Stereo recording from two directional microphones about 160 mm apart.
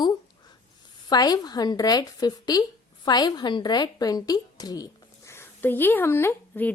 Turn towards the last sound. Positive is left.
turn(degrees=15)  # may be behind; listen again after turning